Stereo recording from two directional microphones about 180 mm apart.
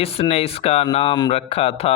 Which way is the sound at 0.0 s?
35° left (ahead or behind).